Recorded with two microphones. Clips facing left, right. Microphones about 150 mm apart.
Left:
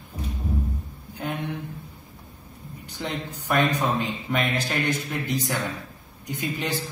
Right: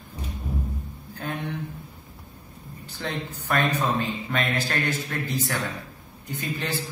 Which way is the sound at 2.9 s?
15° left (ahead or behind).